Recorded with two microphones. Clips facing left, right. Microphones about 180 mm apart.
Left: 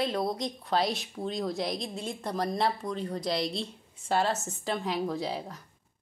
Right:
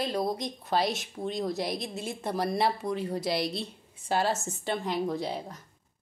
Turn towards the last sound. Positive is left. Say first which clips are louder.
# right 1 dB
turn(degrees=0)  # may be behind; listen again after turning